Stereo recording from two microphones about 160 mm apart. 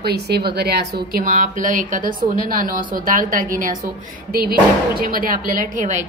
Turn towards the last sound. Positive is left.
turn(degrees=-55)  # may be behind; listen again after turning